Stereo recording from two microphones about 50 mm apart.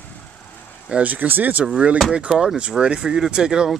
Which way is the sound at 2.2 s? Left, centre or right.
Centre.